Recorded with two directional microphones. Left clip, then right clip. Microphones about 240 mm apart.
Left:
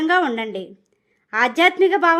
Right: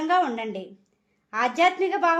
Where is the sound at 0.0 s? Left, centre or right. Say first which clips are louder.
Left 4 dB; left.